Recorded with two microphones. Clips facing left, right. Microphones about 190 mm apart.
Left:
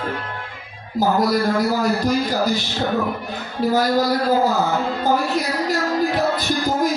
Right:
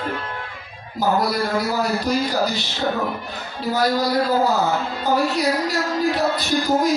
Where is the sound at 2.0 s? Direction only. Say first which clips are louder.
Left 2 dB; 45° left (ahead or behind).